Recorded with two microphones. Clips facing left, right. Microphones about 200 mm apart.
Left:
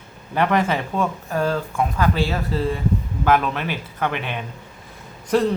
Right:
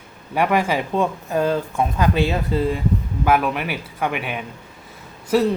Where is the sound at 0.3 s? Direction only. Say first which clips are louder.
Right 1 dB; 10° right (ahead or behind).